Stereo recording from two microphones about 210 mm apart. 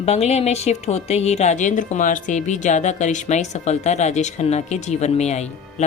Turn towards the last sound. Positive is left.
turn(degrees=30)  # may be behind; listen again after turning